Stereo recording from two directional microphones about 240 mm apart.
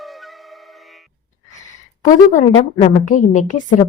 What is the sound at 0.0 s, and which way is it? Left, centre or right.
Music, centre.